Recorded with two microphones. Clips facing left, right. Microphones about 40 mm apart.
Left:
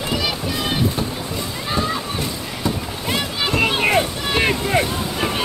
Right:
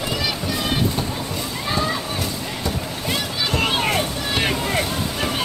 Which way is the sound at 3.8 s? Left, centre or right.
Left.